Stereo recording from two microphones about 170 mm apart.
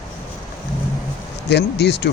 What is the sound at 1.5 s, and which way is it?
Speech, 80° left.